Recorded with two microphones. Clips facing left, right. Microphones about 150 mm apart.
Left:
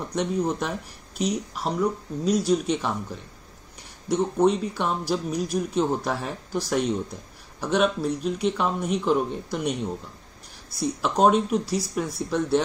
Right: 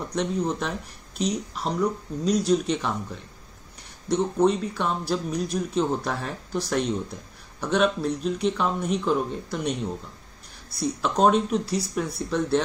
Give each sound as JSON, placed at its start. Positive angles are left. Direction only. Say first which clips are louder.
{"t": 0.1, "sound": "speech", "louder": "left 1 dB", "side_deg": 10}
{"t": 4.1, "sound": "speech", "louder": "even", "side_deg": 15}